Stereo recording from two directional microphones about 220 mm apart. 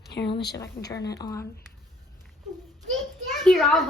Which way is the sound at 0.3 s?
50° left (ahead or behind).